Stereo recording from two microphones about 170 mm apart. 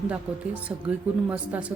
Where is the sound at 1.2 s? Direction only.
10° right (ahead or behind).